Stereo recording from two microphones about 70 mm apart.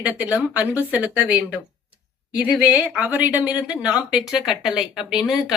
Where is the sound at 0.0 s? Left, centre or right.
Centre.